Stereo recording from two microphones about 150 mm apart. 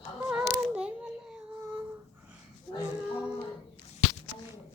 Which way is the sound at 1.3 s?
10° right (ahead or behind).